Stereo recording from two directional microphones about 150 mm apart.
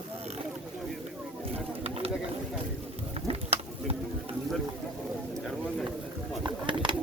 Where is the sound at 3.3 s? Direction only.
40° right (ahead or behind).